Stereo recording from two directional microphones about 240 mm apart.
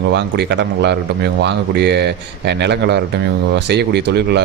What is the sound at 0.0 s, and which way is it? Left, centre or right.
A man's voice, right.